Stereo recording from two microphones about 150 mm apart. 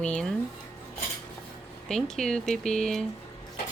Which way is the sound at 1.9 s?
5° left (ahead or behind).